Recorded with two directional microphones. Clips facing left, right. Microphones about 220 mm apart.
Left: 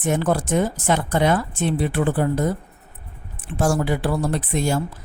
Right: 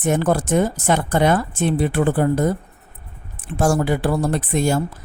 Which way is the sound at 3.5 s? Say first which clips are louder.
Right 2 dB; 50° right (ahead or behind).